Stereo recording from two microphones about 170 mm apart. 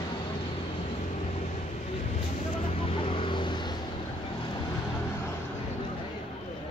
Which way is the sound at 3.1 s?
30° left (ahead or behind).